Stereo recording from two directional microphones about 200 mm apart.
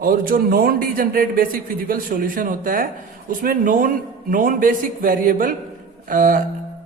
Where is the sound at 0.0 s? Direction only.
45° right (ahead or behind).